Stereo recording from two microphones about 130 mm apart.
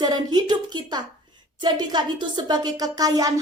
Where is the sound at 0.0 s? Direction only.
35° right (ahead or behind).